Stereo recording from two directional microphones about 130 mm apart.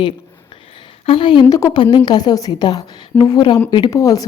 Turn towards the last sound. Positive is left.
turn(degrees=25)  # may be behind; listen again after turning